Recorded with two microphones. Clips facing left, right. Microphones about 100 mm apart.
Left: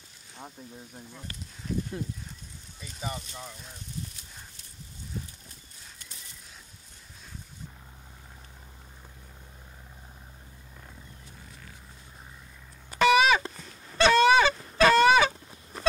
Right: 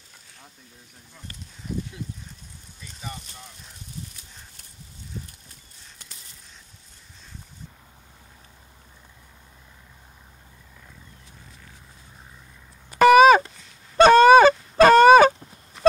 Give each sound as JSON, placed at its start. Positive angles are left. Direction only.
{"t": 13.0, "sound": "a sound", "side_deg": -45}
{"t": 13.9, "sound": "goose", "side_deg": -45}
{"t": 14.8, "sound": "fowl", "side_deg": -45}
{"t": 15.7, "sound": "goat", "side_deg": 40}